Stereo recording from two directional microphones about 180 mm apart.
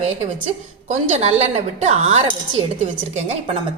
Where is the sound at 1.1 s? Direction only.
40° right (ahead or behind).